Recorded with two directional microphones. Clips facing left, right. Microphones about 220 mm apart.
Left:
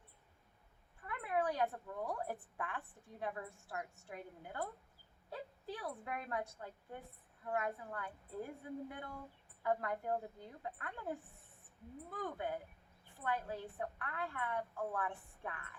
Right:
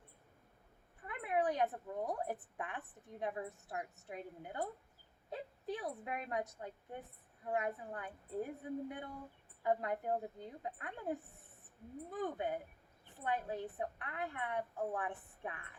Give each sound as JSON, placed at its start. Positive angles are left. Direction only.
{"t": 1.0, "sound": "a woman's voice", "side_deg": -20}